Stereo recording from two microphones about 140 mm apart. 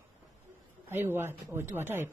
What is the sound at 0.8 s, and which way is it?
Speech, 15° right (ahead or behind).